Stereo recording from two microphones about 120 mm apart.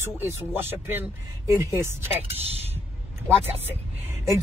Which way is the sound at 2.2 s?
55° right (ahead or behind).